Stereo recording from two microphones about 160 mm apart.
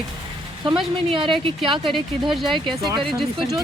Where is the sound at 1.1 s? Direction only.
30° right (ahead or behind).